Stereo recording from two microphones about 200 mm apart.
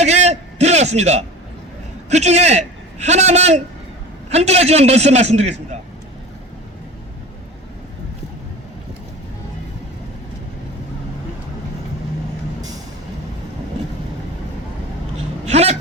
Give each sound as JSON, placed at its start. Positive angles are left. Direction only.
{"t": 0.0, "sound": "a sound", "side_deg": -35}
{"t": 2.0, "sound": "a man's voice", "side_deg": -35}
{"t": 15.4, "sound": "vehicle", "side_deg": -35}